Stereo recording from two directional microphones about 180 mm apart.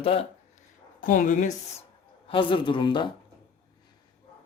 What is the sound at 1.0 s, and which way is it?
Speech, 45° left (ahead or behind).